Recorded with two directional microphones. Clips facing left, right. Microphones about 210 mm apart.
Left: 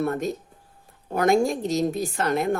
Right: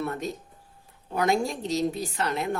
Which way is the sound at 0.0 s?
50° left (ahead or behind).